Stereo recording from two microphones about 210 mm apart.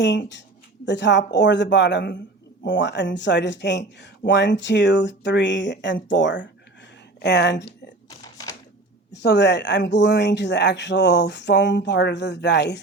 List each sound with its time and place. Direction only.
0.0 s speech: 55° left (ahead or behind)
8.2 s a sound: 15° left (ahead or behind)
9.1 s speech: 55° left (ahead or behind)